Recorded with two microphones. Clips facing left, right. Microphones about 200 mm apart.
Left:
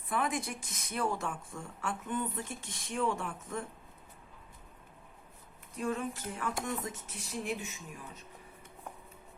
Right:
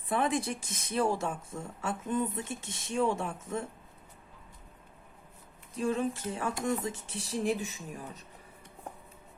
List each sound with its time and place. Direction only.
0.1 s a woman's voice: 30° right (ahead or behind)
5.7 s a woman's voice: 30° right (ahead or behind)